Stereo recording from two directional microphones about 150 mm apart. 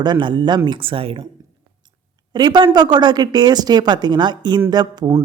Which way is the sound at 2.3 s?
30° right (ahead or behind).